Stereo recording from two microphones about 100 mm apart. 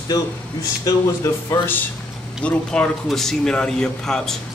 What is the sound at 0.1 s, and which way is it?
Speech, 40° left (ahead or behind).